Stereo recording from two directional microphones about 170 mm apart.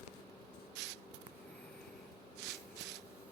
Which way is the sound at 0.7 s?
90° right.